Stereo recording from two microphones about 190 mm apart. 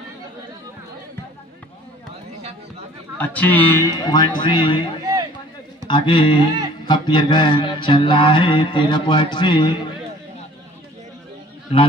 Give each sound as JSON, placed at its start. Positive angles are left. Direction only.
{"t": 3.2, "sound": "mantra", "side_deg": 10}